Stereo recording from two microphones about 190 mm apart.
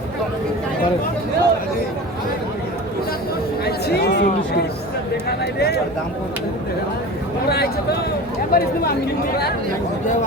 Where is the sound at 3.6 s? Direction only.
55° left (ahead or behind).